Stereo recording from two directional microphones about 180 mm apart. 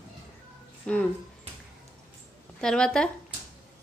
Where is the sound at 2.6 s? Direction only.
5° left (ahead or behind).